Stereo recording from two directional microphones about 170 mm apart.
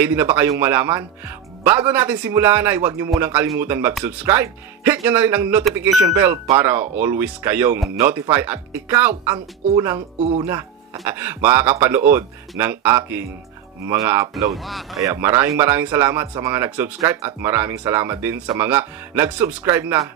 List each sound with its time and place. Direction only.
0.0 s speech: 15° right (ahead or behind)
11.1 s speech: 15° right (ahead or behind)
14.5 s speech: centre (ahead or behind)
15.0 s speech: 15° right (ahead or behind)